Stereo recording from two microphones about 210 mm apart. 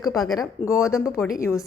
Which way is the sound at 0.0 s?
15° left (ahead or behind).